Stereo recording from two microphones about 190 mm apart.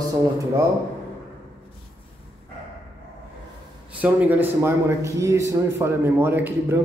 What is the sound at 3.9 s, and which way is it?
A man's voice, 10° right (ahead or behind).